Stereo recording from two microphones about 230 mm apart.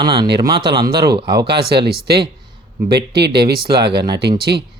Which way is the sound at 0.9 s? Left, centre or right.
Right.